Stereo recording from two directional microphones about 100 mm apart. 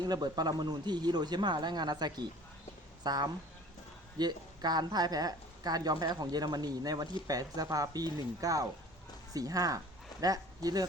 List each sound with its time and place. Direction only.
0.0 s speech: 40° right (ahead or behind)